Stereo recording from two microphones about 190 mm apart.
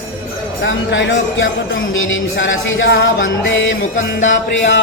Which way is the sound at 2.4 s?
85° left.